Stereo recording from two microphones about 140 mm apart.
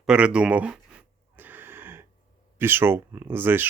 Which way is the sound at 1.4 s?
15° right (ahead or behind).